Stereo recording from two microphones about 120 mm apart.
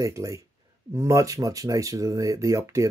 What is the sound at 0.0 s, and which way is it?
Speech, 25° right (ahead or behind).